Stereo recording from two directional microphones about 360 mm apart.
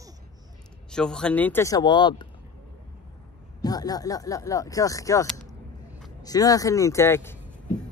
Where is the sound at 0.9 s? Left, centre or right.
Centre.